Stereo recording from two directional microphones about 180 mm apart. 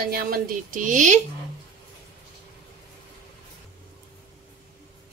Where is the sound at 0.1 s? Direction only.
55° right (ahead or behind).